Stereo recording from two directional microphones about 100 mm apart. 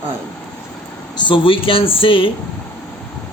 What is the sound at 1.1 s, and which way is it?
Speech, 55° left (ahead or behind).